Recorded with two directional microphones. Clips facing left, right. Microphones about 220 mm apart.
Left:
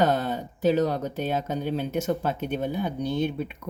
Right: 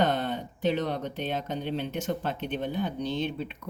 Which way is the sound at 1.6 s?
40° left (ahead or behind).